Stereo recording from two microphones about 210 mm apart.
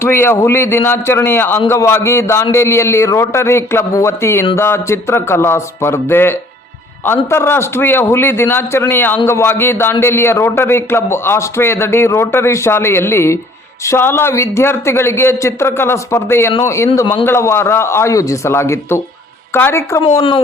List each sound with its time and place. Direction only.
0.0 s a man's voice: 10° left (ahead or behind)